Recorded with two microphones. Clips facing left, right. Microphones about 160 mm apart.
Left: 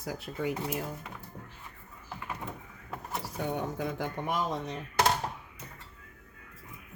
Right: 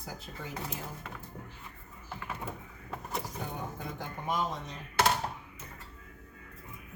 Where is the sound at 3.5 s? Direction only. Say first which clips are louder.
Left 7 dB; 85° left.